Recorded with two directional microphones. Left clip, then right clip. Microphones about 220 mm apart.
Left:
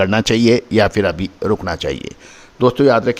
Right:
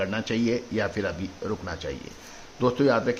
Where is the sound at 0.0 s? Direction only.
50° left (ahead or behind).